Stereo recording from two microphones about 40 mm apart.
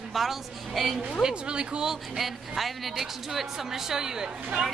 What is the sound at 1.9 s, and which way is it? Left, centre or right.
A woman's voice, centre.